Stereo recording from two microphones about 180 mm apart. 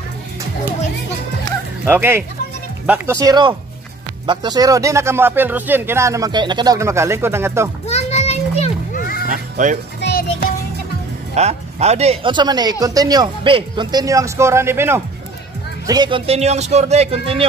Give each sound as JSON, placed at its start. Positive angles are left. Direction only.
{"t": 1.9, "sound": "speech", "side_deg": -10}
{"t": 7.8, "sound": "children playing", "side_deg": 35}
{"t": 9.3, "sound": "speech", "side_deg": -45}
{"t": 9.9, "sound": "music", "side_deg": 65}
{"t": 11.3, "sound": "speech", "side_deg": -35}
{"t": 15.9, "sound": "a man's voice", "side_deg": -25}